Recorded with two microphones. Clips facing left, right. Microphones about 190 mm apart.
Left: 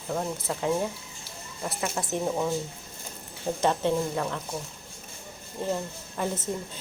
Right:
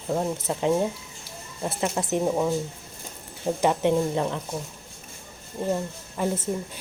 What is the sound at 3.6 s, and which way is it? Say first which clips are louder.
Speech: right 3 dB; 15° right (ahead or behind).